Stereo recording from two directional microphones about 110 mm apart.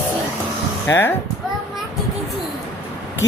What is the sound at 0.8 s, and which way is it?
Speech, 20° left (ahead or behind).